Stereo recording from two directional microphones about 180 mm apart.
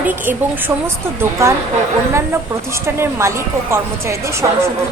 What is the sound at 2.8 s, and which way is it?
Speech, 15° right (ahead or behind).